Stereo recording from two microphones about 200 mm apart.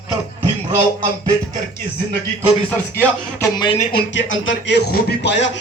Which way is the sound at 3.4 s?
20° left (ahead or behind).